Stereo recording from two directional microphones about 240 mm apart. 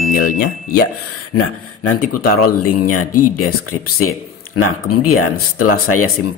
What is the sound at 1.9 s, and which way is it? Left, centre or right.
Speech, left.